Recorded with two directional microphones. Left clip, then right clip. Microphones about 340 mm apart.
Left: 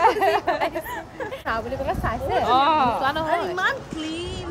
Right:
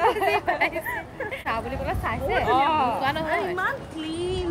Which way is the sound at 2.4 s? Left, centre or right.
Left.